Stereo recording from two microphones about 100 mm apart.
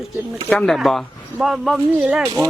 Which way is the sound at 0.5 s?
5° left (ahead or behind).